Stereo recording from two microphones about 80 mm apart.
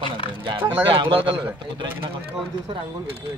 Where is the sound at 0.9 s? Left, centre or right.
Right.